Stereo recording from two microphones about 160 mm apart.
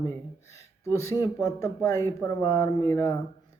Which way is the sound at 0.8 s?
20° left (ahead or behind).